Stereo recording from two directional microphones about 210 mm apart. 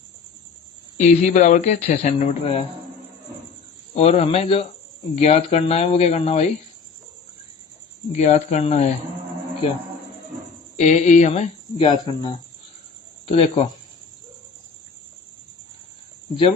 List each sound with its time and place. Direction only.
0.9 s speech: 35° left (ahead or behind)
3.9 s speech: 30° left (ahead or behind)
8.1 s speech: 35° left (ahead or behind)
10.8 s speech: 35° left (ahead or behind)